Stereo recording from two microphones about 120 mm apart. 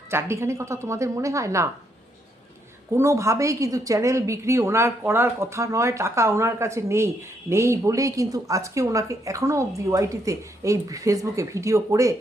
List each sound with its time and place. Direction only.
0.1 s a woman's voice: 20° right (ahead or behind)
2.9 s a woman's voice: 25° right (ahead or behind)